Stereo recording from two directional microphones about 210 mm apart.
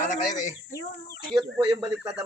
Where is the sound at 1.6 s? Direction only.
20° right (ahead or behind).